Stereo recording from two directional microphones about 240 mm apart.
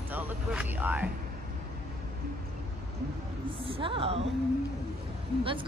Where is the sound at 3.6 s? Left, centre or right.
Right.